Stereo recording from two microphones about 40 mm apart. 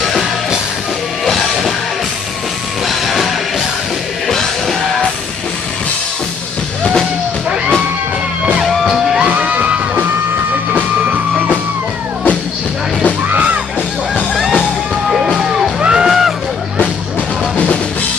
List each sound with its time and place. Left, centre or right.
0.0 s music: centre
2.9 s music: centre
6.8 s music: centre
8.6 s music: centre
9.3 s music: right
10.7 s music: right
14.6 s music: centre
15.8 s music: right
16.1 s a sound: centre